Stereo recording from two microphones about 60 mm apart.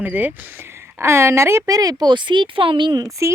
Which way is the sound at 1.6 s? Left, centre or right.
Right.